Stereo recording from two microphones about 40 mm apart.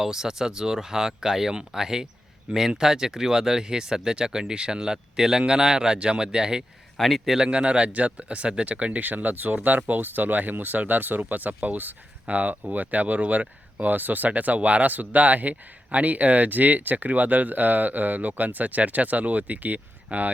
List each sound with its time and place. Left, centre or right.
0.0 s speech: centre
6.9 s speech: centre
7.3 s speech: centre
9.0 s speech: right